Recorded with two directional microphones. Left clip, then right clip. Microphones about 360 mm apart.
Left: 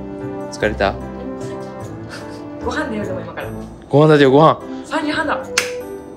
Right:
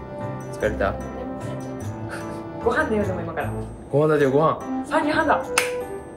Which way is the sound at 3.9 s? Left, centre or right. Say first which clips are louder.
Left 8 dB; centre.